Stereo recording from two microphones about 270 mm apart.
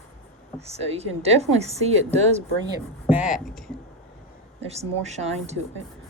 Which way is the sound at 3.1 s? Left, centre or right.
Centre.